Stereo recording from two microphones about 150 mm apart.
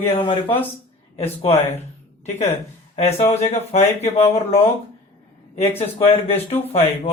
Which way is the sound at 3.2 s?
45° left (ahead or behind).